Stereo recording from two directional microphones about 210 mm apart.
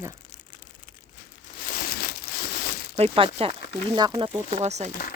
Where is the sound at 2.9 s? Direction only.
30° right (ahead or behind).